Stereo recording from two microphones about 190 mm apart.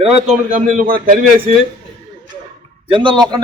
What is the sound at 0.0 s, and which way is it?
A man's voice, 35° right (ahead or behind).